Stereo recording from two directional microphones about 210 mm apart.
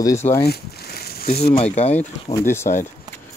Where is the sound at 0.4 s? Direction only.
50° left (ahead or behind).